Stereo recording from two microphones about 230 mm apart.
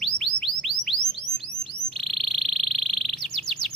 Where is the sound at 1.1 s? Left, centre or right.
Right.